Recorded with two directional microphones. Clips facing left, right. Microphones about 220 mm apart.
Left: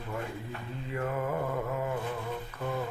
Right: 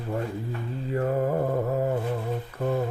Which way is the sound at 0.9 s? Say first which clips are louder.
Right 7 dB; 35° right (ahead or behind).